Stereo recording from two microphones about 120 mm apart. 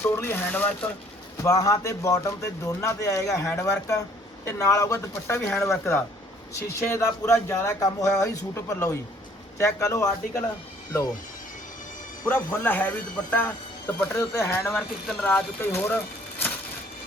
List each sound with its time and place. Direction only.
0.0 s speech: 20° left (ahead or behind)
1.5 s speech: 30° left (ahead or behind)
12.2 s speech: 20° left (ahead or behind)
14.8 s speech: 5° left (ahead or behind)